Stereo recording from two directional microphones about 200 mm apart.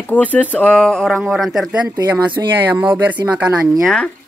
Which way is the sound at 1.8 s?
15° right (ahead or behind).